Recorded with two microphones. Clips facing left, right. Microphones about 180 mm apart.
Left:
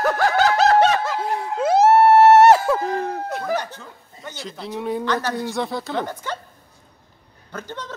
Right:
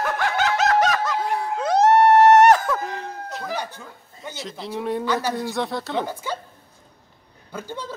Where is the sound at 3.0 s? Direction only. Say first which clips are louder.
Left 6 dB; 55° left (ahead or behind).